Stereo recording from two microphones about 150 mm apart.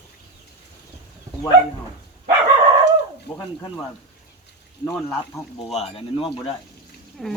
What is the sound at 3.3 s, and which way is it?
Speech, 20° left (ahead or behind).